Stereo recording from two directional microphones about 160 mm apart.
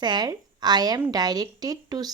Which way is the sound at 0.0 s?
25° right (ahead or behind).